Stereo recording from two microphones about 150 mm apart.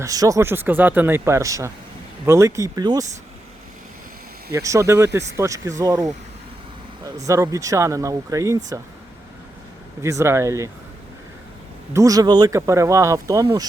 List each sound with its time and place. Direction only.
0.0 s speech: 25° right (ahead or behind)
4.5 s speech: 20° right (ahead or behind)
10.0 s speech: 20° right (ahead or behind)
11.9 s speech: 25° right (ahead or behind)